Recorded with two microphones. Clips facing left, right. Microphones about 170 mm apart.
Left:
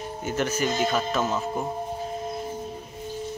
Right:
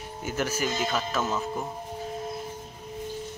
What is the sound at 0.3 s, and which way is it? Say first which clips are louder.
Speech: left 3 dB; 5° right (ahead or behind).